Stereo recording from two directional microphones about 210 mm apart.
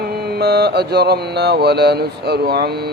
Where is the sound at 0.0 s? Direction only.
50° right (ahead or behind).